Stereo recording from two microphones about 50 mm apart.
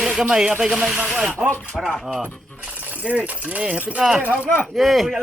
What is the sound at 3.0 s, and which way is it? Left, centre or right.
Speech, right.